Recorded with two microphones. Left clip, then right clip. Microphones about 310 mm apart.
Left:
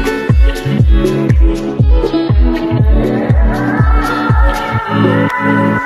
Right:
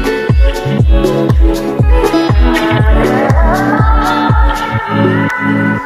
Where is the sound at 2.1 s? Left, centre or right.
Right.